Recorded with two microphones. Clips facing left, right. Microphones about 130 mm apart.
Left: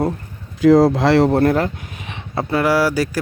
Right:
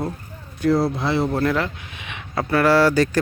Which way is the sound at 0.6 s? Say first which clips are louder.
Left 8 dB; 90° left.